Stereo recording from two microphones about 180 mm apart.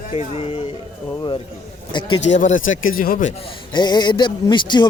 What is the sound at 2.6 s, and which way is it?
Speech, 90° left.